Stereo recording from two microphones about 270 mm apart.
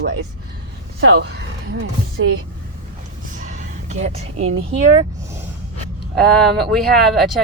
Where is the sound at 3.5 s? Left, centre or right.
Right.